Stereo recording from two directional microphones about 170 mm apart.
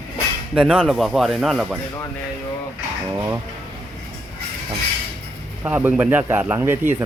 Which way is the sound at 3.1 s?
15° right (ahead or behind).